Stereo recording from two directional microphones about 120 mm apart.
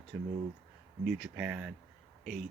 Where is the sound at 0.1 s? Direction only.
10° right (ahead or behind).